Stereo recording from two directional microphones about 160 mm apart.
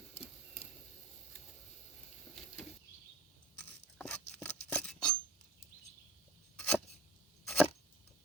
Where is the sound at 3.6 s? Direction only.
5° left (ahead or behind).